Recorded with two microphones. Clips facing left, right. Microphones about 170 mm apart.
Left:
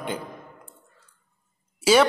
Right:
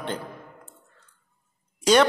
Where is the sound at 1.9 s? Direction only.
5° left (ahead or behind).